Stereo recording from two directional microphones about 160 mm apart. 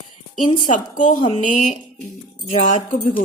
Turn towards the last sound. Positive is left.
turn(degrees=55)  # may be behind; listen again after turning